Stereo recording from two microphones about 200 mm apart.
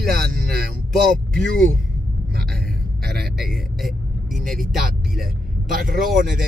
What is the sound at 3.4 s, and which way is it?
Vehicle, centre (ahead or behind).